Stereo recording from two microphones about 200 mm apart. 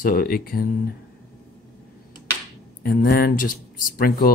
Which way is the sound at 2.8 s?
50° left (ahead or behind).